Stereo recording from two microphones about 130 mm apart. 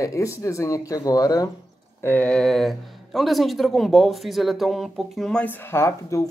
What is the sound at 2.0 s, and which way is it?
Speech, 10° left (ahead or behind).